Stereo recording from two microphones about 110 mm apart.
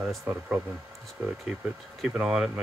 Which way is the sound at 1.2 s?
15° right (ahead or behind).